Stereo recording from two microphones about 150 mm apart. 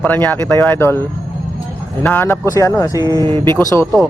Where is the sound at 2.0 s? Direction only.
10° left (ahead or behind).